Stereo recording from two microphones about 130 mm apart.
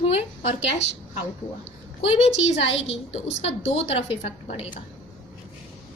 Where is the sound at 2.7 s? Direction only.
50° left (ahead or behind).